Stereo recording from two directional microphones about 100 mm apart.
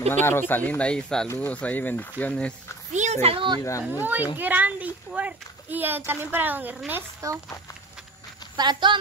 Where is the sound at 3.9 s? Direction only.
20° right (ahead or behind).